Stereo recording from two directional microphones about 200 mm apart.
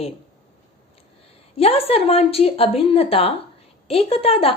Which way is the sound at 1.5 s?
30° left (ahead or behind).